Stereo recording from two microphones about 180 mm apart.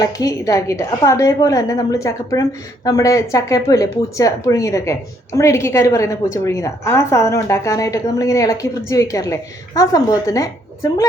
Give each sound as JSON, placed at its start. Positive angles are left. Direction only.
{"t": 0.0, "sound": "a woman's voice", "side_deg": 20}